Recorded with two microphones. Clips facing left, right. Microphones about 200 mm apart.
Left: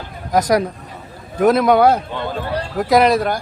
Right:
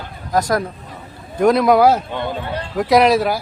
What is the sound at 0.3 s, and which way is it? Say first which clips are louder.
Speech: left 2 dB; 20° left (ahead or behind).